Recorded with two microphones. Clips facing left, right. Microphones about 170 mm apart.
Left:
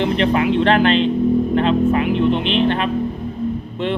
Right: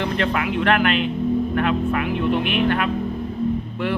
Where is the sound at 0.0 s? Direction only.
20° left (ahead or behind).